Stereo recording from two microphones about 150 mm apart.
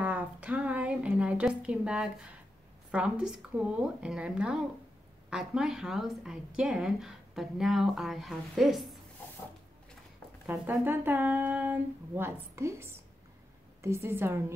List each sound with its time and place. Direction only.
0.0 s a sound: 10° right (ahead or behind)
2.9 s speech: 5° right (ahead or behind)
10.4 s speech: 15° right (ahead or behind)